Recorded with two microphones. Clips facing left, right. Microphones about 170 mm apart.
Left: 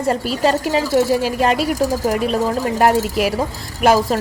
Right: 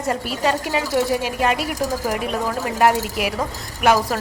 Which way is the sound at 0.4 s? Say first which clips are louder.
Left 4 dB; 30° left (ahead or behind).